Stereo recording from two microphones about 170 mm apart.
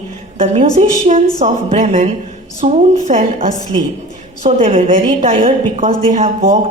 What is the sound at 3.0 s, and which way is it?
Speech, 50° right (ahead or behind).